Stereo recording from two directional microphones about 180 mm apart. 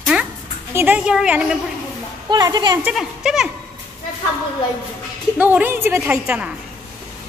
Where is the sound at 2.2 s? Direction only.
20° right (ahead or behind).